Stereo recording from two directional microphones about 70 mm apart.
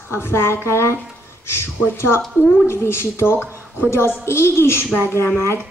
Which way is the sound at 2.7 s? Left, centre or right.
Left.